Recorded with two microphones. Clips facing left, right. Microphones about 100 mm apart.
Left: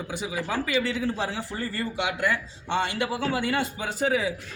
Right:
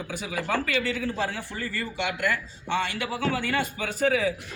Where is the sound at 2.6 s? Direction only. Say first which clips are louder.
Left 2 dB; 20° left (ahead or behind).